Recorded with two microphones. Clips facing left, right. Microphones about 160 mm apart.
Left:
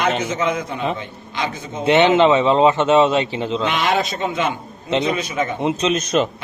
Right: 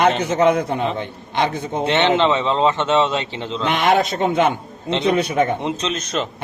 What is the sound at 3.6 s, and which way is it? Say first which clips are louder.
A man's voice: right 5 dB; 55° right (ahead or behind).